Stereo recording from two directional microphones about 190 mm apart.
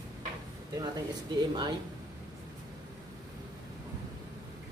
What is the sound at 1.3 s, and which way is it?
Speech, 20° right (ahead or behind).